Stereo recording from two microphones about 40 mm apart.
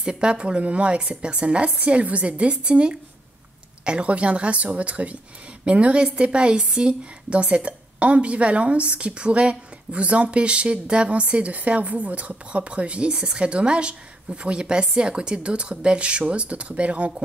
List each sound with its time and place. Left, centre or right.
0.0 s a woman's voice: right